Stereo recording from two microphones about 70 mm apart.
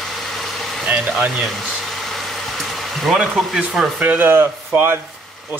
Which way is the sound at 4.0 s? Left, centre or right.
Right.